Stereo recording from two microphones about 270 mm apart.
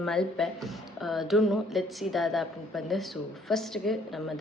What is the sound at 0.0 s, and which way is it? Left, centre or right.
Speech, centre.